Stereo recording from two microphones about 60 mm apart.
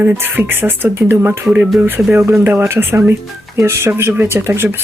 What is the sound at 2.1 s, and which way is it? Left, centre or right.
Speech, right.